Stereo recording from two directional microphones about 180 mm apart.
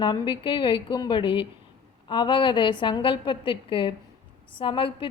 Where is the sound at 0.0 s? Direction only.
25° left (ahead or behind).